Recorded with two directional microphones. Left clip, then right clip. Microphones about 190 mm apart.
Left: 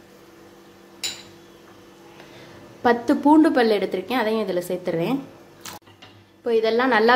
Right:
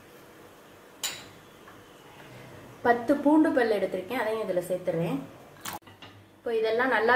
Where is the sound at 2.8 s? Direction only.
55° left (ahead or behind).